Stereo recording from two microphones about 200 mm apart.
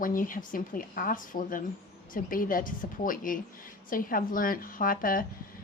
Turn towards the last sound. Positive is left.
turn(degrees=45)  # may be behind; listen again after turning